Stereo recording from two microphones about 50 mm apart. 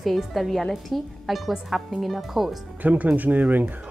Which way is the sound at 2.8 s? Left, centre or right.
Right.